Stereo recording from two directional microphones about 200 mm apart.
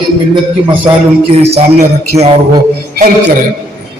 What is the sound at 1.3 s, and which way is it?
Speech, 30° right (ahead or behind).